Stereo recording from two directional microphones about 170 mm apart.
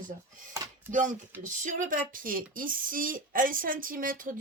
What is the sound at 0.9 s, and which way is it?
Speech, 50° right (ahead or behind).